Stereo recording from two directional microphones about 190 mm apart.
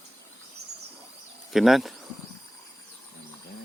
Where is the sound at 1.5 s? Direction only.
Centre (ahead or behind).